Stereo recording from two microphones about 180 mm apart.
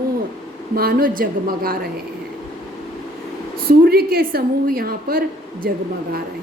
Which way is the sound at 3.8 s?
60° right (ahead or behind).